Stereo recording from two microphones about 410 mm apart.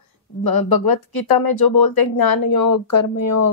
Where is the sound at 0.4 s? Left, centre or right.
Left.